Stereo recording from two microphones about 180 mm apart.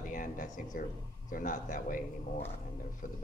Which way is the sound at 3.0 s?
50° left (ahead or behind).